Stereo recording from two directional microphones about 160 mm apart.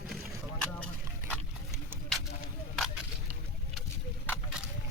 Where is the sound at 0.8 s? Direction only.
5° left (ahead or behind).